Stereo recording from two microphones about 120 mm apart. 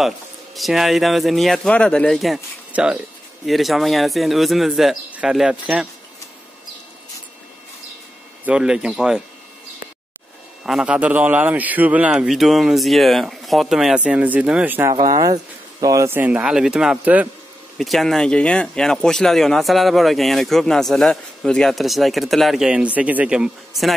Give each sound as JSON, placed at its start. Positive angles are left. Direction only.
{"t": 0.6, "sound": "speech", "side_deg": 0}
{"t": 8.5, "sound": "speech", "side_deg": -5}
{"t": 10.6, "sound": "a man's voice", "side_deg": -5}
{"t": 15.0, "sound": "a man's voice", "side_deg": -30}
{"t": 17.7, "sound": "speech", "side_deg": 0}